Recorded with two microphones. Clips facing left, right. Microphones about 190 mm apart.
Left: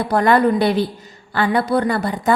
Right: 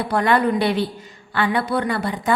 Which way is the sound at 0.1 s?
40° left (ahead or behind).